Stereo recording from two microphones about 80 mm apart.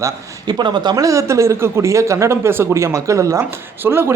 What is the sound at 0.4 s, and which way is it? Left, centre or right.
Speech, right.